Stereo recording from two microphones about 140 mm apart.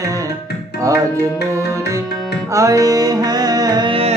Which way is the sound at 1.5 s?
20° right (ahead or behind).